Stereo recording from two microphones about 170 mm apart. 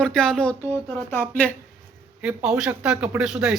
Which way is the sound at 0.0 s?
5° left (ahead or behind).